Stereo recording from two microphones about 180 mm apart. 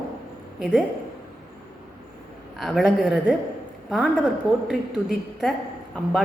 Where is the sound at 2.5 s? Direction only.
Centre (ahead or behind).